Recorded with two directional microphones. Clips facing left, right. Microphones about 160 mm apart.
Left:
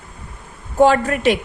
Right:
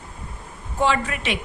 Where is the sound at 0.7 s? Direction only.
45° left (ahead or behind).